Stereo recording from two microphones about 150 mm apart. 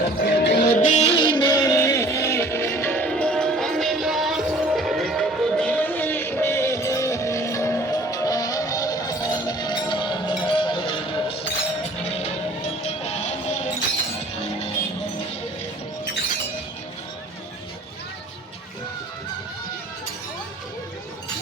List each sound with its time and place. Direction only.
0.2 s music: 90° left; by 13.6 s 45° left (ahead or behind)